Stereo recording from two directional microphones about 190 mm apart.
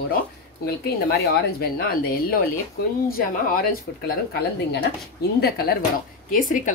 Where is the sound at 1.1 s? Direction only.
55° left (ahead or behind).